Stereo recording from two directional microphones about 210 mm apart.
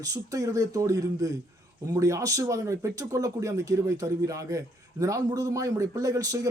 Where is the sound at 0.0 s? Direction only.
15° right (ahead or behind).